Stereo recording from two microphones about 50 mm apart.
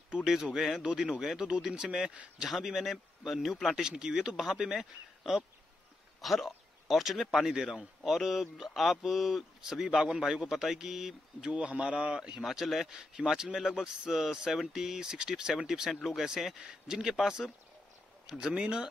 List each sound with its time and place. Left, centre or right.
0.2 s speech: centre
3.7 s speech: centre
11.5 s a man's voice: right
12.4 s speech: centre
16.5 s speech: centre
18.5 s a man's voice: centre